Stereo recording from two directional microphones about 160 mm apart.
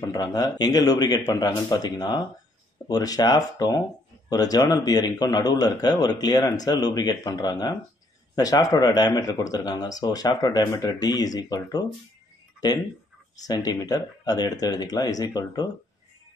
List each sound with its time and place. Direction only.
0.0 s speech: 20° left (ahead or behind)
12.5 s a sound: 25° left (ahead or behind)
13.5 s speech: 25° left (ahead or behind)